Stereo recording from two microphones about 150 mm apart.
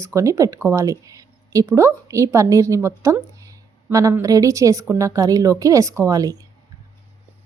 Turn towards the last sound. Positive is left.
turn(degrees=-25)  # may be behind; listen again after turning